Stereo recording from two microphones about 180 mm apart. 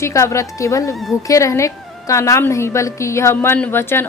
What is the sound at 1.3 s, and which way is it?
A woman's voice, 15° left (ahead or behind).